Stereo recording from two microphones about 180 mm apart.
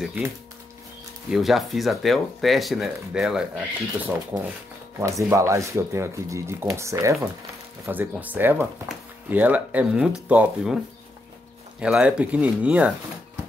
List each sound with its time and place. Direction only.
0.0 s speech: 5° right (ahead or behind)
1.3 s speech: centre (ahead or behind)
5.0 s speech: 15° right (ahead or behind)
11.8 s speech: 5° right (ahead or behind)